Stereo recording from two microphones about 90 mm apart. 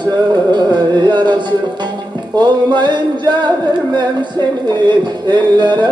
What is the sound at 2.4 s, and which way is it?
Music, 55° right (ahead or behind).